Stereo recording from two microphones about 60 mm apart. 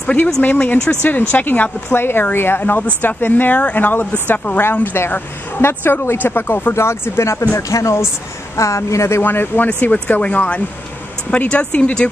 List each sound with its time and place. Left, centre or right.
0.4 s a woman's voice: left
6.7 s speech: left
9.2 s a woman's voice: left
9.7 s speech: left